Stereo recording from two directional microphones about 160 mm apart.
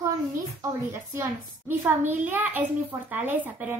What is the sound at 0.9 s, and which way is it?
A woman's voice, 15° right (ahead or behind).